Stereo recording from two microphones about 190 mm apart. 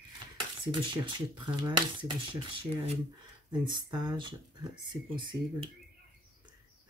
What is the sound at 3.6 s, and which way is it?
Speech, 25° right (ahead or behind).